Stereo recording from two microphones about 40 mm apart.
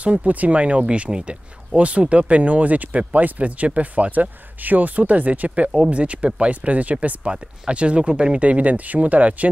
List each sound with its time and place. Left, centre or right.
0.0 s speech: right